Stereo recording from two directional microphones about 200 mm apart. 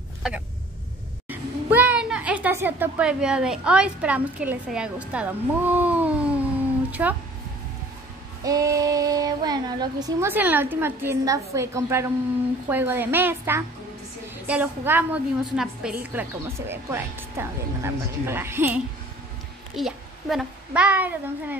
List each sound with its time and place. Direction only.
1.3 s a woman's voice: 10° right (ahead or behind)
8.5 s a child's voice: 15° right (ahead or behind)